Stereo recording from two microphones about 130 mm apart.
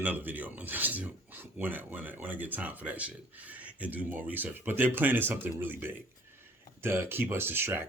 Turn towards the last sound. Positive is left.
turn(degrees=-15)  # may be behind; listen again after turning